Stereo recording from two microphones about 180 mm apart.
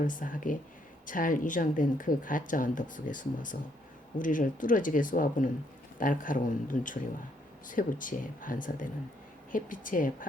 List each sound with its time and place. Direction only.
0.0 s speech: 50° left (ahead or behind)